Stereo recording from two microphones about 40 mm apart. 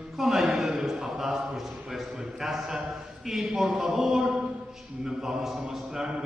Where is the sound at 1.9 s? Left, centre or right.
Centre.